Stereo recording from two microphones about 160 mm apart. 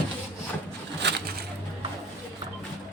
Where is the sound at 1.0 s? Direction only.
90° right.